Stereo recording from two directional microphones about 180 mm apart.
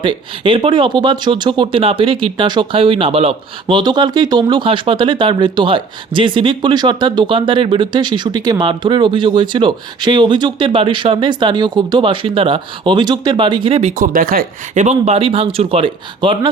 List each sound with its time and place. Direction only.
0.0 s speech: 30° right (ahead or behind)
13.9 s speech: 50° right (ahead or behind); by 16.5 s 25° right (ahead or behind)